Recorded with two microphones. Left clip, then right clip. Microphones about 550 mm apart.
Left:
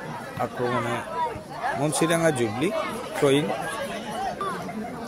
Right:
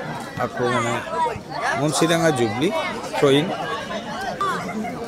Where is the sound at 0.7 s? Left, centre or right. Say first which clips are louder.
Right 5 dB; centre.